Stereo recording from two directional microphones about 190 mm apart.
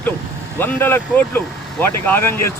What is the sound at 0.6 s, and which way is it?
Speech, 10° left (ahead or behind).